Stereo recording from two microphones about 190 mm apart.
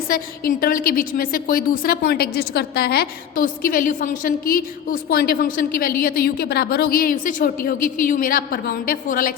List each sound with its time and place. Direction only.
0.1 s a woman's voice: 50° left (ahead or behind)